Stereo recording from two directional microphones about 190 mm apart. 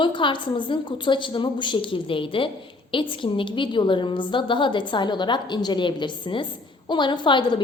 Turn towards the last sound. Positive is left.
turn(degrees=25)  # may be behind; listen again after turning